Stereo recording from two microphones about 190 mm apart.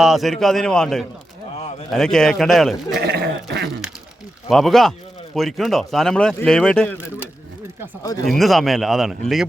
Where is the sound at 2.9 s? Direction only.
60° right (ahead or behind).